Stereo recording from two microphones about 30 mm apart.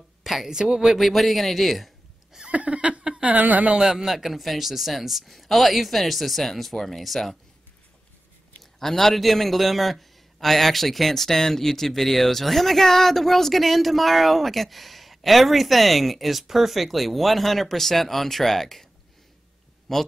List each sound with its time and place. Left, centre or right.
0.2 s a sound: centre
0.5 s speech: right
0.9 s a man's voice: centre
2.5 s a sound: right
3.3 s speech: right
3.8 s a man's voice: centre
8.7 s a man's voice: centre
19.9 s speech: centre